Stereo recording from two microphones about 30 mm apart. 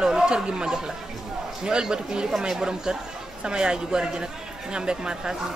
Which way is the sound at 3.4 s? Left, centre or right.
Right.